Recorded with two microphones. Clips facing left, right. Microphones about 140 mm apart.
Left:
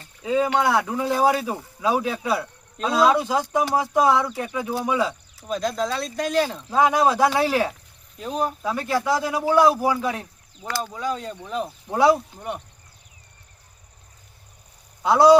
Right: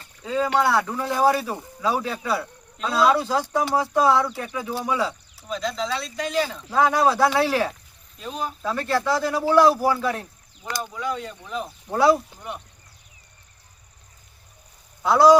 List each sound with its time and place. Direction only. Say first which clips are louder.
0.2 s speech: left 1 dB; 15° left (ahead or behind)
5.5 s speech: left 2 dB; 50° left (ahead or behind)
6.7 s speech: even; 15° left (ahead or behind)
8.2 s speech: left 5 dB; 35° left (ahead or behind)
8.6 s speech: even; 10° left (ahead or behind)
10.9 s speech: left 1 dB; 35° left (ahead or behind)
11.9 s speech: even; 20° left (ahead or behind)
15.0 s a man's voice: left 1 dB; 20° left (ahead or behind)